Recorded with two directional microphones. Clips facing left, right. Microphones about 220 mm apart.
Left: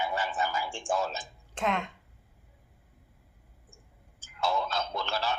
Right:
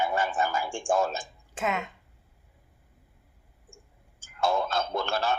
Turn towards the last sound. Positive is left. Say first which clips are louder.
# right 4 dB
turn(degrees=-50)  # may be behind; listen again after turning